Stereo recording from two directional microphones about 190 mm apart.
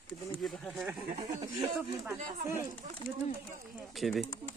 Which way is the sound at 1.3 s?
15° right (ahead or behind).